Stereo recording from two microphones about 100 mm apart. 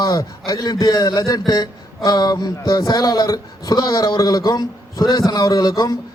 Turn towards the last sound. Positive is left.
turn(degrees=35)  # may be behind; listen again after turning